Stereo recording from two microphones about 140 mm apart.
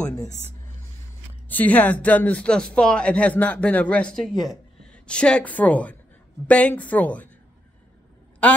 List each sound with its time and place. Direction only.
1.5 s a woman's voice: 10° left (ahead or behind)